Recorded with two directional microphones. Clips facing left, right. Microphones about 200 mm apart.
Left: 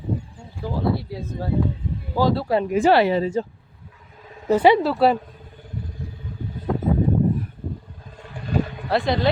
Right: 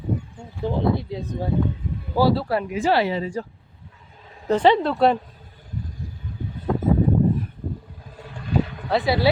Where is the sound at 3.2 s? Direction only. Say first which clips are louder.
Left 5 dB; 25° left (ahead or behind).